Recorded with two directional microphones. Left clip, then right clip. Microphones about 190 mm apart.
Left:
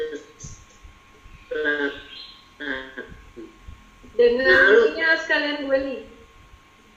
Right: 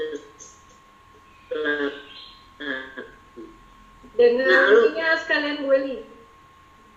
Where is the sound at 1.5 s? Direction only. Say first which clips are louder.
Left 1 dB; 25° left (ahead or behind).